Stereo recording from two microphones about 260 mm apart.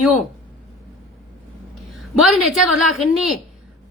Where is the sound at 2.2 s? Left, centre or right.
Centre.